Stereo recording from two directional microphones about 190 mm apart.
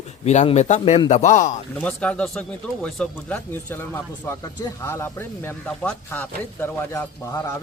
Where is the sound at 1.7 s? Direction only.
5° left (ahead or behind).